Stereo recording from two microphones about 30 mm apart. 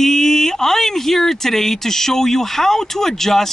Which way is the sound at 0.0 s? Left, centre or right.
Centre.